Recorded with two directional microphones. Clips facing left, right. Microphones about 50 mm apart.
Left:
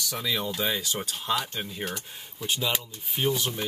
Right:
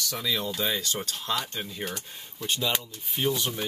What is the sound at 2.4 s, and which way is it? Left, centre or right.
Rub, centre.